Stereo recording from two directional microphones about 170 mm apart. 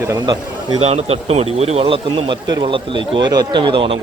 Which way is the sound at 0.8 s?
35° right (ahead or behind).